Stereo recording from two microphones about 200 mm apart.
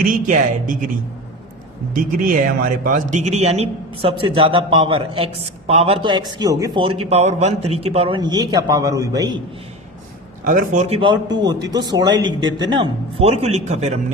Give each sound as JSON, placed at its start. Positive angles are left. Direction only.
{"t": 0.0, "sound": "speech", "side_deg": -40}
{"t": 1.9, "sound": "speech", "side_deg": -45}
{"t": 10.4, "sound": "a man's voice", "side_deg": -40}